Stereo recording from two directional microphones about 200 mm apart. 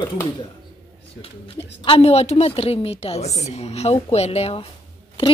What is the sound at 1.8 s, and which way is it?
A woman's voice, 30° left (ahead or behind).